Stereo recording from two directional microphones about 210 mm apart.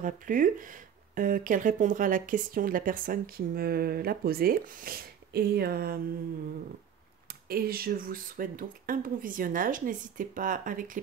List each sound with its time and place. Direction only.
0.0 s speech: 40° right (ahead or behind)
7.4 s speech: 45° right (ahead or behind)